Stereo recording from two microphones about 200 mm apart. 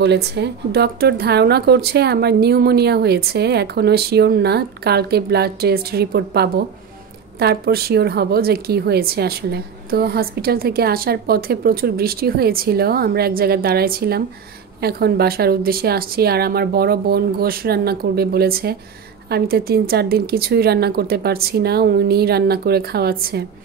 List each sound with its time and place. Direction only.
0.0 s a woman's voice: 55° right (ahead or behind)